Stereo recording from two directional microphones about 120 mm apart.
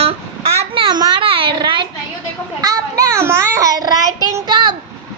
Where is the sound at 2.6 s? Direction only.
30° right (ahead or behind).